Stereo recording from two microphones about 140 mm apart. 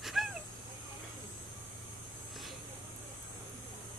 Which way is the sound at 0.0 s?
Centre (ahead or behind).